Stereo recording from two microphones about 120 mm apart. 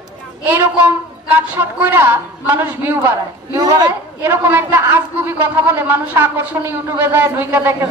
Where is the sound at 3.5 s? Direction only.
35° right (ahead or behind).